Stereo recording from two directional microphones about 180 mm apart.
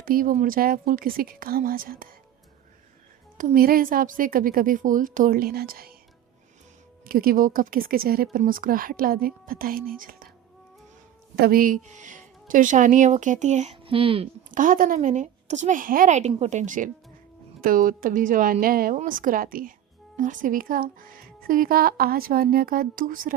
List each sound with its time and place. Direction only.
0.0 s speech: 50° right (ahead or behind)
3.3 s speech: 50° right (ahead or behind)
7.0 s speech: 50° right (ahead or behind)
11.3 s speech: 55° right (ahead or behind); by 14.3 s 30° right (ahead or behind)
14.5 s speech: 50° right (ahead or behind)